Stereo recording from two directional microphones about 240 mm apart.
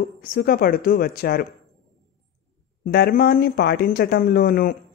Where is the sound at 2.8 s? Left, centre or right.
Left.